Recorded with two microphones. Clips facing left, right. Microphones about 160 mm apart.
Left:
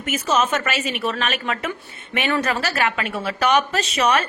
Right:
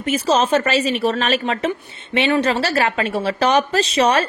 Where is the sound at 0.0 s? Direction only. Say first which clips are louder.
Right 4 dB; 30° right (ahead or behind).